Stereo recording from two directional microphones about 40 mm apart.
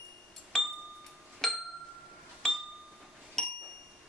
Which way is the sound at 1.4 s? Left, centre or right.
Centre.